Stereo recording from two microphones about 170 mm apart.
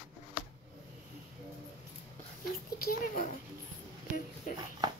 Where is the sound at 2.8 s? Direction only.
55° left (ahead or behind).